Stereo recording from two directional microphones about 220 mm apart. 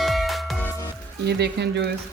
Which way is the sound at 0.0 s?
Centre (ahead or behind).